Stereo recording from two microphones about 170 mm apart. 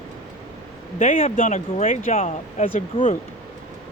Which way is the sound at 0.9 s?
50° left (ahead or behind).